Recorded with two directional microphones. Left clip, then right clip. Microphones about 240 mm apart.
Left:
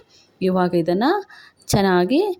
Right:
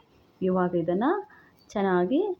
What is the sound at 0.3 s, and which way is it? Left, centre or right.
Speech, left.